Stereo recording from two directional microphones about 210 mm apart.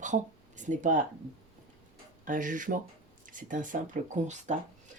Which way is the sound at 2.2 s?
40° right (ahead or behind).